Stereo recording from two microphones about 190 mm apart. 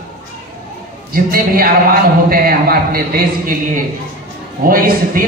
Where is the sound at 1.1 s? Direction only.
50° right (ahead or behind).